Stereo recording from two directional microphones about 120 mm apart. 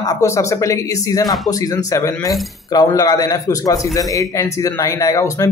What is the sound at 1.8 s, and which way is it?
A man's voice, 30° left (ahead or behind).